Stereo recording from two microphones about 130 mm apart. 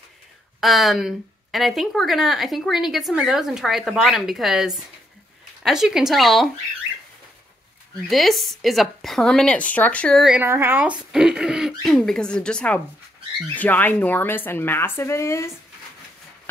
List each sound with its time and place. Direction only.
0.6 s speech: centre (ahead or behind)
8.1 s speech: centre (ahead or behind)
10.4 s a woman's voice: 15° right (ahead or behind); by 15.5 s 20° left (ahead or behind)